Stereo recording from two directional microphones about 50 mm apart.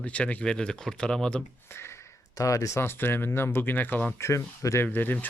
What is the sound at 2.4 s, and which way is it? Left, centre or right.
Speech, left.